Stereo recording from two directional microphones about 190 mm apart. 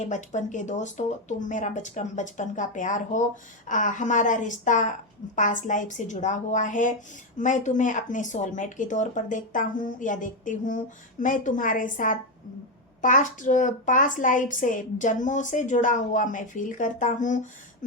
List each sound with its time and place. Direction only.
0.0 s a woman's voice: 40° left (ahead or behind)